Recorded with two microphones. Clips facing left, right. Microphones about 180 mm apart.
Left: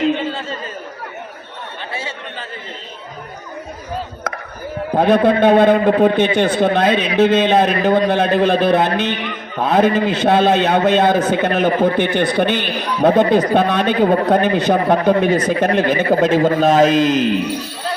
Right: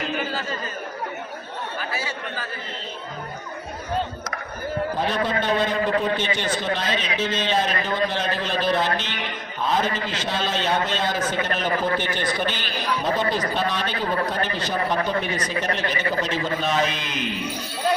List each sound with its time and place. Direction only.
0.2 s chatter: 25° left (ahead or behind)
1.9 s chatter: 25° left (ahead or behind)
4.9 s a man's voice: 55° left (ahead or behind)
14.9 s a man's voice: 45° left (ahead or behind)